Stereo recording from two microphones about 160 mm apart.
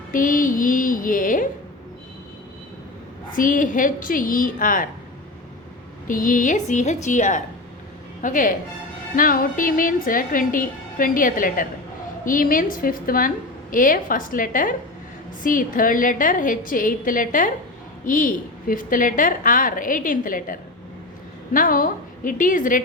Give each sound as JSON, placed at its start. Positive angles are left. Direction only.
{"t": 0.1, "sound": "a woman's voice", "side_deg": 60}
{"t": 3.3, "sound": "a woman's voice", "side_deg": 55}
{"t": 6.1, "sound": "a woman's voice", "side_deg": 60}